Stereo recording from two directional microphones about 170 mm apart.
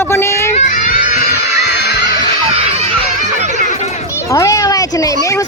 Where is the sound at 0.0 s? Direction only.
15° left (ahead or behind).